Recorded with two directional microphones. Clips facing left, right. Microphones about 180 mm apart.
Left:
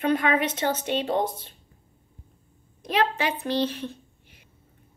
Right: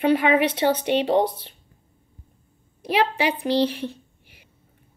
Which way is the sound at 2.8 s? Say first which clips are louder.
Right 3 dB; 10° right (ahead or behind).